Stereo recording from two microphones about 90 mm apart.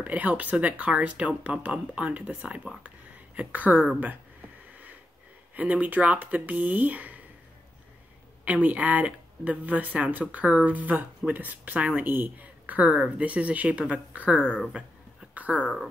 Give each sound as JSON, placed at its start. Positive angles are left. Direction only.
{"t": 0.0, "sound": "speech", "side_deg": -15}
{"t": 5.5, "sound": "speech", "side_deg": -15}
{"t": 8.6, "sound": "speech", "side_deg": -15}
{"t": 14.6, "sound": "a sound", "side_deg": -5}